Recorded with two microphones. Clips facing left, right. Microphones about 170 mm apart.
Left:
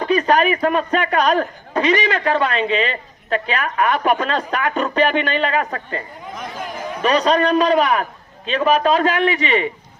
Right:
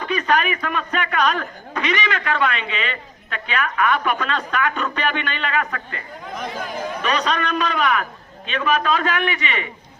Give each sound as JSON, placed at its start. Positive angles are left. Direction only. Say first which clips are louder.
{"t": 0.0, "sound": "a man's voice", "louder": "left 5 dB", "side_deg": 35}
{"t": 7.0, "sound": "a man's voice", "louder": "left 8 dB", "side_deg": 35}